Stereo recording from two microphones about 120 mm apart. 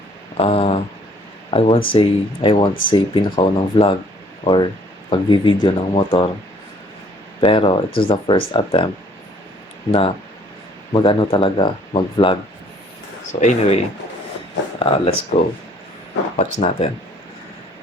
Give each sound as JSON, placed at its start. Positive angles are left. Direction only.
{"t": 0.3, "sound": "a sound", "side_deg": 55}
{"t": 1.5, "sound": "speech", "side_deg": 55}
{"t": 7.4, "sound": "speech", "side_deg": 45}
{"t": 9.9, "sound": "speech", "side_deg": 50}
{"t": 13.4, "sound": "speech", "side_deg": 75}
{"t": 16.4, "sound": "speech", "side_deg": 55}